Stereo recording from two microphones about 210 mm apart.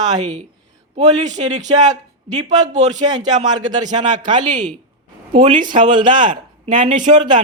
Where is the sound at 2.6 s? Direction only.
35° right (ahead or behind).